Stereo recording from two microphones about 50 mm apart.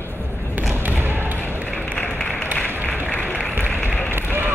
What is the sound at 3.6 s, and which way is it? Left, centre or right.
Vehicle, left.